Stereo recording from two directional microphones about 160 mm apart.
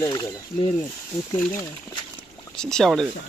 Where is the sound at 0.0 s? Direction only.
20° left (ahead or behind).